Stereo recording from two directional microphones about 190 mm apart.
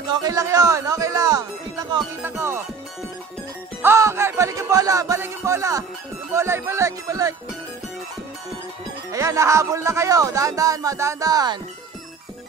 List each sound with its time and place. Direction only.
0.1 s speech: 20° right (ahead or behind)
3.8 s speech: 15° right (ahead or behind)
9.1 s speech: 15° right (ahead or behind)